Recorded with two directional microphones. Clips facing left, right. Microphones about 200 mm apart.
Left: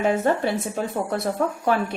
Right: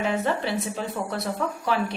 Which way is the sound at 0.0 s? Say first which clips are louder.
Left 4 dB; 50° left (ahead or behind).